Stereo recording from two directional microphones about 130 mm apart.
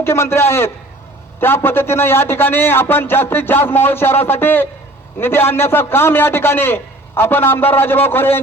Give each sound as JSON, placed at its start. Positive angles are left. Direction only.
{"t": 0.0, "sound": "a man's voice", "side_deg": 20}